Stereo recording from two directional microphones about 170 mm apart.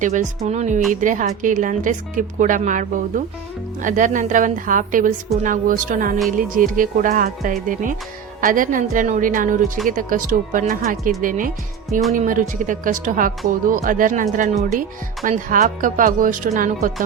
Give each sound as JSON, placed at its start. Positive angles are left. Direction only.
{"t": 0.0, "sound": "a woman's voice", "side_deg": -45}